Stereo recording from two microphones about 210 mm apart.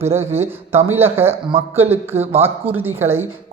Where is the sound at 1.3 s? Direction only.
25° right (ahead or behind).